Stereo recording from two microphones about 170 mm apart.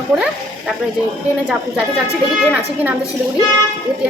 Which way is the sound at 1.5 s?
5° right (ahead or behind).